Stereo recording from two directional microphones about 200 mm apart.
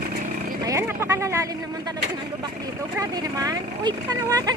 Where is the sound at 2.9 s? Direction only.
20° right (ahead or behind).